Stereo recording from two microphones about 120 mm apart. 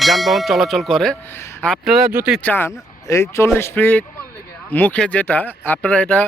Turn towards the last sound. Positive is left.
turn(degrees=10)  # may be behind; listen again after turning